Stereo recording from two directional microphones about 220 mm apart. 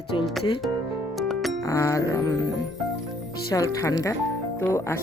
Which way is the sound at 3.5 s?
15° left (ahead or behind).